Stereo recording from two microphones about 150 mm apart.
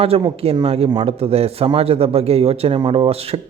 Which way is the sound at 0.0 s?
40° right (ahead or behind).